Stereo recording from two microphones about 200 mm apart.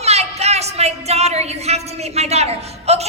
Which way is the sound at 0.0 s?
30° right (ahead or behind).